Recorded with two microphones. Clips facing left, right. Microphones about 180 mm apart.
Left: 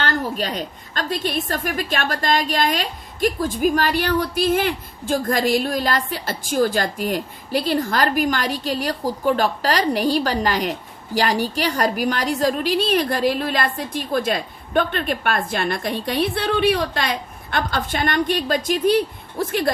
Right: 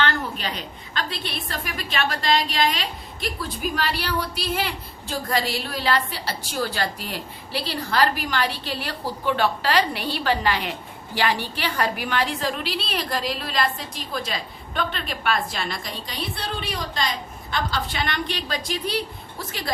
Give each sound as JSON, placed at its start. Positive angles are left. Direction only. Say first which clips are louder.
{"t": 0.0, "sound": "a woman's voice", "louder": "left 2 dB", "side_deg": 45}